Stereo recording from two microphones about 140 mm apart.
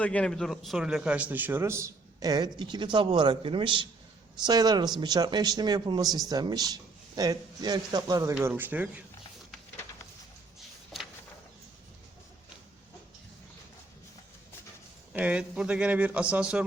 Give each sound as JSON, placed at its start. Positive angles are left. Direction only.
{"t": 0.0, "sound": "a man's voice", "side_deg": 10}
{"t": 8.4, "sound": "speech", "side_deg": -15}
{"t": 15.1, "sound": "speech", "side_deg": -10}